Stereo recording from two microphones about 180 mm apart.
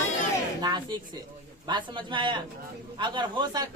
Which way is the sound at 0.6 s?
25° right (ahead or behind).